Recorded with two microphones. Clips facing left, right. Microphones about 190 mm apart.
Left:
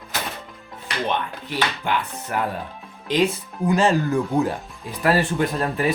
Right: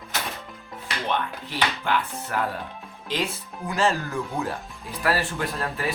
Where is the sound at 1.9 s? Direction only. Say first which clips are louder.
Left 1 dB; 15° left (ahead or behind).